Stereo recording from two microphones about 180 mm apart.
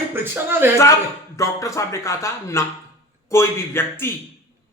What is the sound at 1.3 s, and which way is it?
Speech, 15° left (ahead or behind).